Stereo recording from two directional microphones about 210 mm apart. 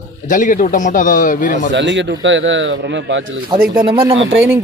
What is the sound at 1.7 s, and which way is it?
Speech, 60° right (ahead or behind).